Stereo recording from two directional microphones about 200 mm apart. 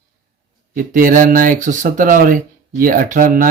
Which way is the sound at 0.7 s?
45° right (ahead or behind).